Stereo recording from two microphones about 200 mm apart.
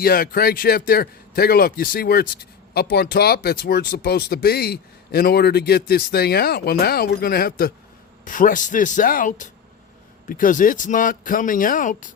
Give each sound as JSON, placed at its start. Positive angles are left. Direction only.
{"t": 0.0, "sound": "speech", "side_deg": 45}